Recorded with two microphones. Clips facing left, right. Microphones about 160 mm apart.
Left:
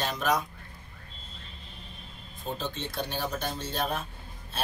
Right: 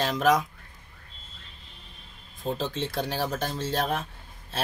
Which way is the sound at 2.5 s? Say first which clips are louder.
Right 3 dB; 90° right.